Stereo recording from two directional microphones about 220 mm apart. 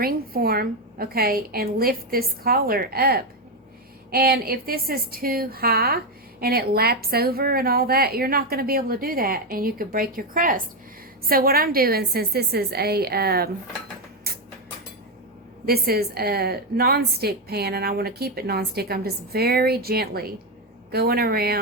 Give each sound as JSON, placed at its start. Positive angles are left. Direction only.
{"t": 0.0, "sound": "a woman's voice", "side_deg": -45}
{"t": 15.6, "sound": "a woman's voice", "side_deg": -45}